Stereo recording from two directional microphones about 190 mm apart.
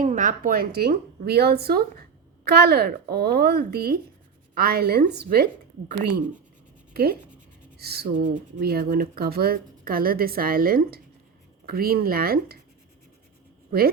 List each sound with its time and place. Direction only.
0.0 s a woman's voice: 45° right (ahead or behind)
6.9 s speech: 55° right (ahead or behind)
8.1 s speech: 40° right (ahead or behind)